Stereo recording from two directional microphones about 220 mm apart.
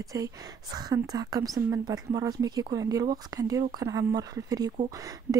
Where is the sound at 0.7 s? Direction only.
20° right (ahead or behind).